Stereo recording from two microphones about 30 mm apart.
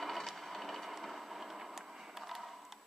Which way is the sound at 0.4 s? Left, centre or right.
Centre.